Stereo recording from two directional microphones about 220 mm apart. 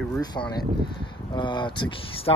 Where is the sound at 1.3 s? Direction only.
20° left (ahead or behind).